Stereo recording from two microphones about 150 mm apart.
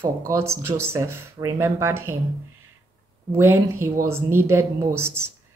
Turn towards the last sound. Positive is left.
turn(degrees=-15)  # may be behind; listen again after turning